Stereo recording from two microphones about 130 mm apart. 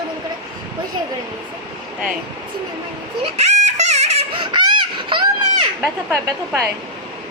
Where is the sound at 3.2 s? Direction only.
55° right (ahead or behind); by 5.2 s 40° right (ahead or behind).